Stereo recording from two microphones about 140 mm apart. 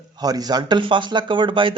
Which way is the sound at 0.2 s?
25° right (ahead or behind).